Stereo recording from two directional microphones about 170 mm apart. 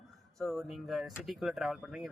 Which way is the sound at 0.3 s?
Centre (ahead or behind).